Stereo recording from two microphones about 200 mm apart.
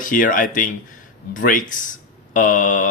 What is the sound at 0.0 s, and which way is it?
Speech, 40° left (ahead or behind).